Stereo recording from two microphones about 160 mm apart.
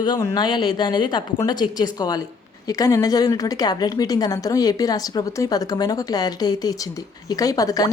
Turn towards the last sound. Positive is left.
turn(degrees=20)  # may be behind; listen again after turning